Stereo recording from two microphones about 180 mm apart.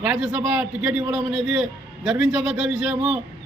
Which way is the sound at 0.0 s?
5° right (ahead or behind).